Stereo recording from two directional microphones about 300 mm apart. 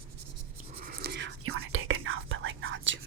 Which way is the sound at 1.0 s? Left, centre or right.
Right.